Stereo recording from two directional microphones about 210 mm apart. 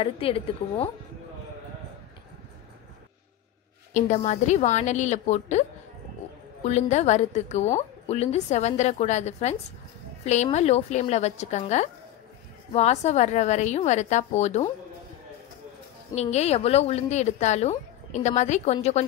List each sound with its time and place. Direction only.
0.0 s a woman's voice: 25° left (ahead or behind)
3.9 s a woman's voice: 35° left (ahead or behind)
16.2 s a woman's voice: 30° left (ahead or behind)